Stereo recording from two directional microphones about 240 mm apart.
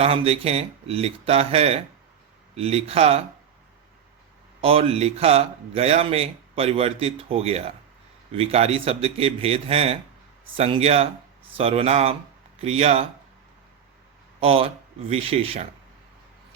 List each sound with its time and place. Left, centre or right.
0.0 s speech: right
4.6 s speech: right
14.3 s speech: right